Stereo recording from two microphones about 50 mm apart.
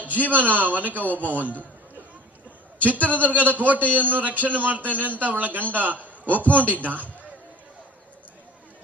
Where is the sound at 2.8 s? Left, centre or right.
Right.